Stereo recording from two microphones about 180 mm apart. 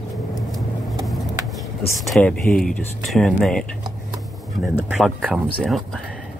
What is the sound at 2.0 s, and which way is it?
Speech, 5° left (ahead or behind).